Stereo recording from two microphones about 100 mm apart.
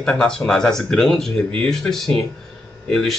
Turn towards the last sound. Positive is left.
turn(degrees=5)  # may be behind; listen again after turning